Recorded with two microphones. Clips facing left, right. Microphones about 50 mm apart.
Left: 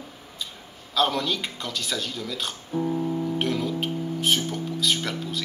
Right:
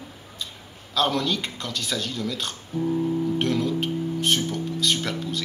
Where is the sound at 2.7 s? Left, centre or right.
Centre.